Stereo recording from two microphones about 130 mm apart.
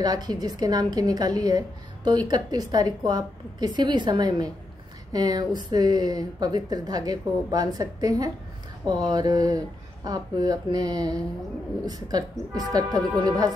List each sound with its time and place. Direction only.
0.0 s a woman's voice: 30° right (ahead or behind)